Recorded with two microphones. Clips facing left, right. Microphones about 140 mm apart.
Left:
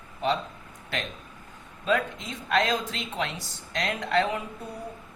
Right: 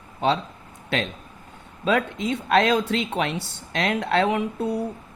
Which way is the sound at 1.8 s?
70° right (ahead or behind).